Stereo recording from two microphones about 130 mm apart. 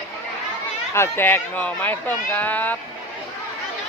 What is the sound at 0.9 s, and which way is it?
Speech, 15° left (ahead or behind).